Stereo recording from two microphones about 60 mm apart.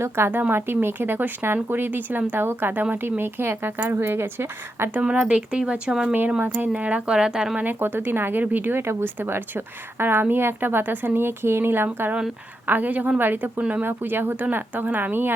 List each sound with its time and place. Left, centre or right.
0.3 s a woman's voice: right
5.2 s speech: centre
6.4 s a woman's voice: right
6.7 s speech: right
7.6 s a woman's voice: right
13.6 s speech: right
13.8 s a woman's voice: right